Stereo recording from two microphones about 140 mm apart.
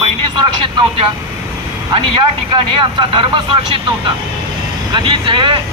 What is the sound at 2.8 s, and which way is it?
Speech, 35° right (ahead or behind).